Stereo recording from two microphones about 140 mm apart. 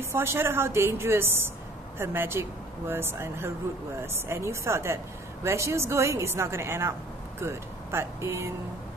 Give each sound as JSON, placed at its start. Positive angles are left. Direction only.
{"t": 0.0, "sound": "a woman's voice", "side_deg": -15}